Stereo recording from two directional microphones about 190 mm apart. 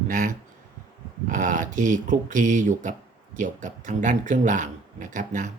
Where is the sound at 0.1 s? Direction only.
45° right (ahead or behind).